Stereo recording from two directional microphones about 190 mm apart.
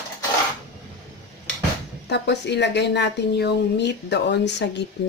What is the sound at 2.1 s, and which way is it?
A woman's voice, 65° left (ahead or behind).